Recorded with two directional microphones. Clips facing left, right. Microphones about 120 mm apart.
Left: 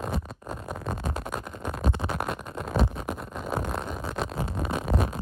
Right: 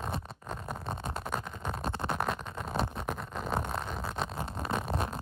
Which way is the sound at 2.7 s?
5° left (ahead or behind).